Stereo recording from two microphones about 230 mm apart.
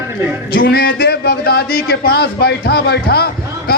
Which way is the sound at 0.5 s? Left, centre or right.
Left.